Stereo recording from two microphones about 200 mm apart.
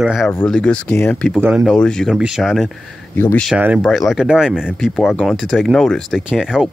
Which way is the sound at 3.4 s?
5° right (ahead or behind).